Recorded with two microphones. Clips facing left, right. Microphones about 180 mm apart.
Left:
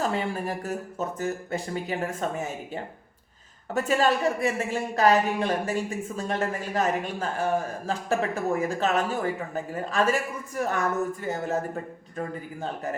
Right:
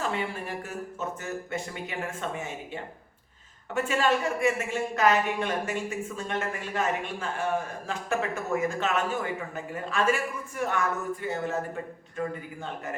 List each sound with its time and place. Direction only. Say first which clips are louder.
0.0 s speech: left 4 dB; 40° left (ahead or behind)